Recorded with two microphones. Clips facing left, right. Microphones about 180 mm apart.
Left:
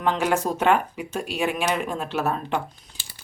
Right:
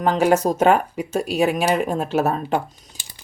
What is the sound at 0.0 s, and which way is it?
A woman's voice, 40° right (ahead or behind).